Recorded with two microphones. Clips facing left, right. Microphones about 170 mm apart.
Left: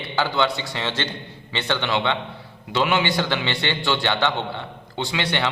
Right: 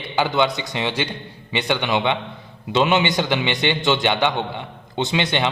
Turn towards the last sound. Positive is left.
turn(degrees=-20)  # may be behind; listen again after turning